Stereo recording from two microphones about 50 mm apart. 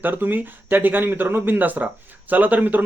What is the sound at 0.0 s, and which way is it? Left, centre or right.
A man's voice, right.